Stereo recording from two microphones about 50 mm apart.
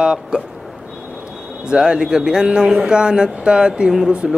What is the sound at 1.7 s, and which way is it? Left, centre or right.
Mantra, centre.